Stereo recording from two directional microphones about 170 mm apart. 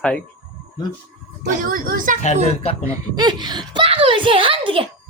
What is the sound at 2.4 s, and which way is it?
Speech, 35° left (ahead or behind).